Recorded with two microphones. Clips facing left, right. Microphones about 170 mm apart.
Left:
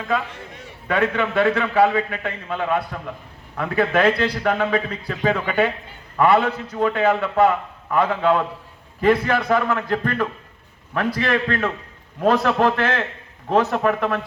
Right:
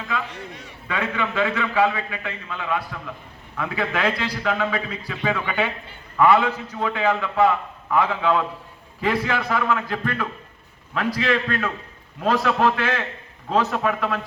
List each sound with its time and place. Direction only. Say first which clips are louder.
0.1 s a man's voice: left 6 dB; 50° left (ahead or behind)